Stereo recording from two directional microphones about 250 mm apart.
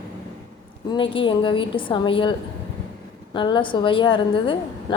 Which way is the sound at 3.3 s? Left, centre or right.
Centre.